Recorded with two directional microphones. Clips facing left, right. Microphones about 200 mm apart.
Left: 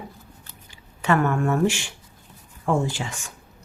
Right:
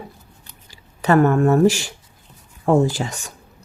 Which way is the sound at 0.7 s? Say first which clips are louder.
Right 5 dB; 40° right (ahead or behind).